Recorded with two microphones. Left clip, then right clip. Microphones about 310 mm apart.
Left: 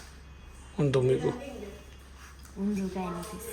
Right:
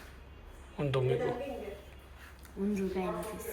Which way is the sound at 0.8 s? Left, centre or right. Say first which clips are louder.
Left 5 dB; left.